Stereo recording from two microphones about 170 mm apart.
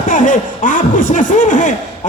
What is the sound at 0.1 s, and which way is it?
A man's voice, 50° left (ahead or behind).